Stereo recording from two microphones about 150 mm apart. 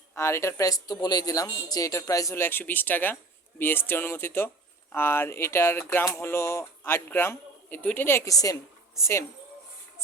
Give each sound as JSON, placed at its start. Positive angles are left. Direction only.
{"t": 0.1, "sound": "a man's voice", "side_deg": 15}